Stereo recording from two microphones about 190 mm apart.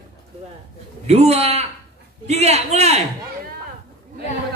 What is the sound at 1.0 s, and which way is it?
A man's voice, 35° right (ahead or behind).